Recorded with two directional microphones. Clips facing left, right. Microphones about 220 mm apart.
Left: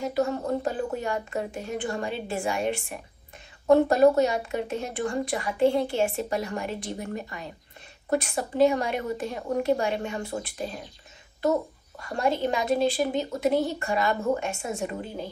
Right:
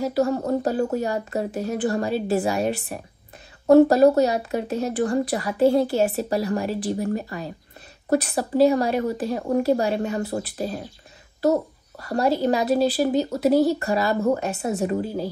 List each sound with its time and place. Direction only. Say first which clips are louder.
0.0 s speech: right 4 dB; 35° right (ahead or behind)
12.0 s speech: right 4 dB; 40° right (ahead or behind)